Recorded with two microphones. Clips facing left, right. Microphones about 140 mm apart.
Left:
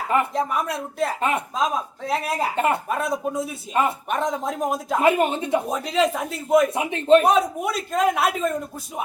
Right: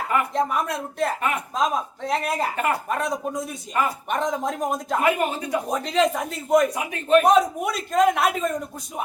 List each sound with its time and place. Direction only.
0.3 s a man's voice: centre (ahead or behind)
2.6 s speech: 25° left (ahead or behind)
2.9 s a man's voice: 5° left (ahead or behind)
3.8 s speech: 25° left (ahead or behind)
4.1 s a man's voice: centre (ahead or behind)
5.0 s speech: 25° left (ahead or behind)
5.7 s a man's voice: 5° left (ahead or behind)
6.7 s speech: 30° left (ahead or behind)
7.3 s a man's voice: centre (ahead or behind)